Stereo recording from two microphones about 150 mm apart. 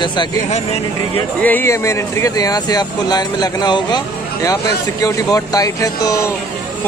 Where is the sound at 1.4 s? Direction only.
15° left (ahead or behind).